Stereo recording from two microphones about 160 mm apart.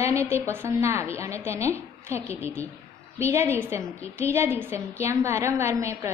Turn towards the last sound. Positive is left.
turn(degrees=-15)  # may be behind; listen again after turning